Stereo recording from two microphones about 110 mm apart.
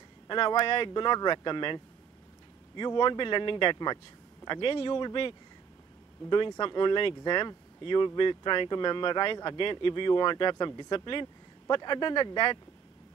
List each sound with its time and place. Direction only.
0.3 s speech: 40° left (ahead or behind)
4.5 s speech: 50° left (ahead or behind)
6.6 s speech: 45° left (ahead or behind)